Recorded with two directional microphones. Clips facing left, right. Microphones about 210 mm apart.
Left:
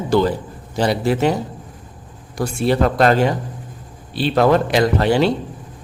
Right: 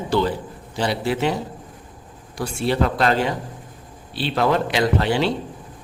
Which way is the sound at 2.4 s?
45° left (ahead or behind).